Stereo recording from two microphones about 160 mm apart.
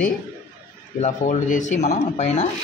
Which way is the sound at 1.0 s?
50° left (ahead or behind).